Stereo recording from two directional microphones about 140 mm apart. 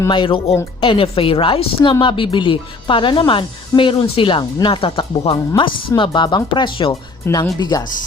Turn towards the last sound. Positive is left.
turn(degrees=30)  # may be behind; listen again after turning